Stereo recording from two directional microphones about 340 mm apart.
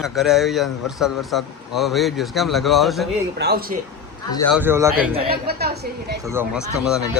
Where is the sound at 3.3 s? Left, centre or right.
Right.